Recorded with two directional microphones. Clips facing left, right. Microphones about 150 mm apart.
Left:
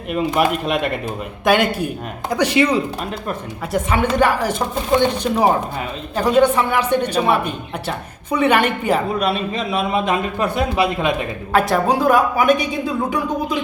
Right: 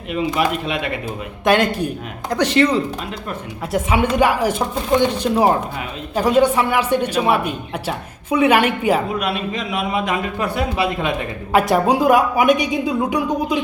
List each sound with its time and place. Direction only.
0.1 s speech: 50° left (ahead or behind)
1.5 s speech: 5° left (ahead or behind)
3.7 s speech: 5° right (ahead or behind)
9.1 s a man's voice: 35° left (ahead or behind); by 11.3 s 20° left (ahead or behind)
11.7 s speech: 15° right (ahead or behind)